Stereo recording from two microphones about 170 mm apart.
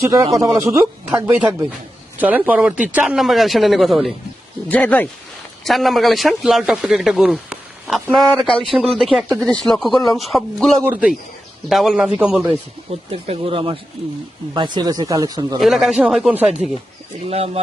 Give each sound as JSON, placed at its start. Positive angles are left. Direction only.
{"t": 0.0, "sound": "speech", "side_deg": -20}
{"t": 10.8, "sound": "speech", "side_deg": -10}
{"t": 13.1, "sound": "speech", "side_deg": -35}
{"t": 15.6, "sound": "speech", "side_deg": 0}
{"t": 17.2, "sound": "speech", "side_deg": -35}